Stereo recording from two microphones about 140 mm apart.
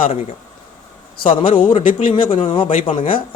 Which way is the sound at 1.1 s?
35° left (ahead or behind).